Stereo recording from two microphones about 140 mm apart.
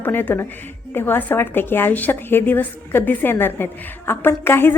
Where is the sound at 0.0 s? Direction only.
15° left (ahead or behind).